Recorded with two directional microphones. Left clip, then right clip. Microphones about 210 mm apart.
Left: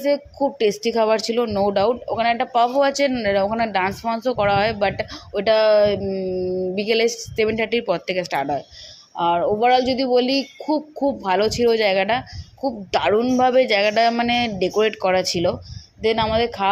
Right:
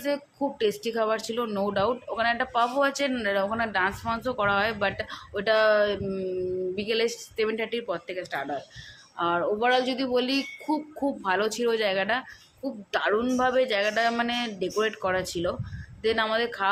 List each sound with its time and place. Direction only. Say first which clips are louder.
0.6 s speech: left 7 dB; 20° left (ahead or behind)
9.1 s speech: left 7 dB; 20° left (ahead or behind)